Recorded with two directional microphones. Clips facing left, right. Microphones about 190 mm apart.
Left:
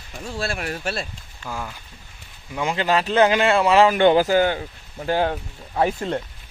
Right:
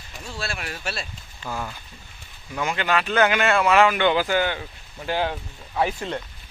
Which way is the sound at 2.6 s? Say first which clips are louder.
Left 3 dB; 30° left (ahead or behind).